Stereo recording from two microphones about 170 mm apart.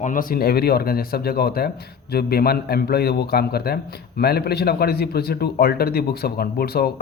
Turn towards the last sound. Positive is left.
turn(degrees=65)  # may be behind; listen again after turning